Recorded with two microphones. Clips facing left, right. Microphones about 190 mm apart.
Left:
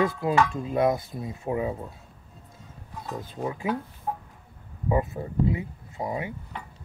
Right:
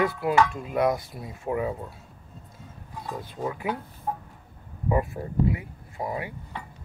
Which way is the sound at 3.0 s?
25° left (ahead or behind).